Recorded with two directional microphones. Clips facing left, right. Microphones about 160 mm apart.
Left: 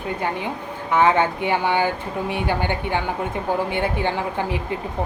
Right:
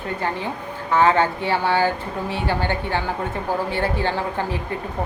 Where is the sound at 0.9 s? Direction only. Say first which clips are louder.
Even; 15° left (ahead or behind).